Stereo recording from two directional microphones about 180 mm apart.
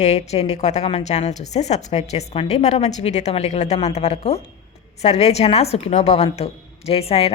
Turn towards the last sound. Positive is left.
turn(degrees=35)  # may be behind; listen again after turning